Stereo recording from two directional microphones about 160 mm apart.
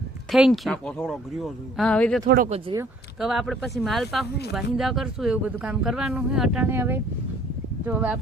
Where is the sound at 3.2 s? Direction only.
Centre (ahead or behind).